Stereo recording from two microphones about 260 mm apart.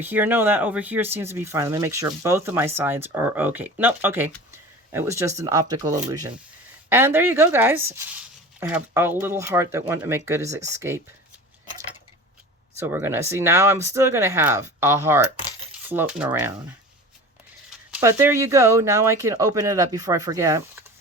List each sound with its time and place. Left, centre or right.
0.0 s speech: centre
12.8 s speech: centre
17.9 s speech: centre